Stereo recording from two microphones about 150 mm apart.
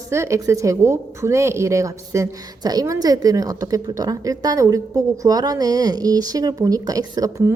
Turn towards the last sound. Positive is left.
turn(degrees=-25)  # may be behind; listen again after turning